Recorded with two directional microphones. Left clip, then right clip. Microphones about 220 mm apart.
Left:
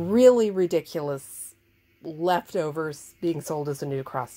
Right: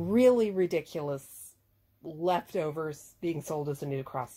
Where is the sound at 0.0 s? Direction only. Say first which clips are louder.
Left 6 dB; 30° left (ahead or behind).